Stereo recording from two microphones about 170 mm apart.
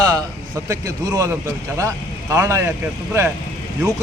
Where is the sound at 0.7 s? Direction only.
20° right (ahead or behind).